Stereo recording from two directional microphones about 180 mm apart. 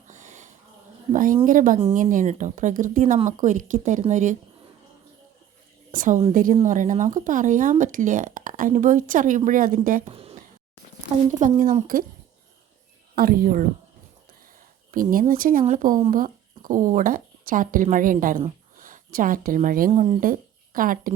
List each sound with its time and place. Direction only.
0.1 s a sound: 45° right (ahead or behind)
1.1 s speech: 45° right (ahead or behind)
5.9 s a woman's voice: 45° right (ahead or behind)
10.1 s a sound: 30° right (ahead or behind)
11.3 s speech: 45° right (ahead or behind)
13.1 s speech: 55° right (ahead or behind)
14.9 s speech: 50° right (ahead or behind)